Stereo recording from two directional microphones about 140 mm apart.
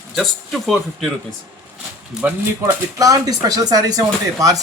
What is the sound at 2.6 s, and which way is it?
Speech, 25° right (ahead or behind).